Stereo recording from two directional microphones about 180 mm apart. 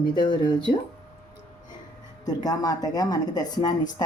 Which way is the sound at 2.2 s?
20° left (ahead or behind).